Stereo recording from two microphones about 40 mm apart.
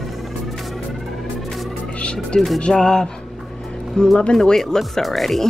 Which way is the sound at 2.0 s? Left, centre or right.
Left.